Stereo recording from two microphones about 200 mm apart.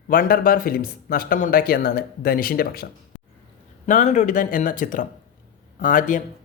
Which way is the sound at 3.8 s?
40° left (ahead or behind).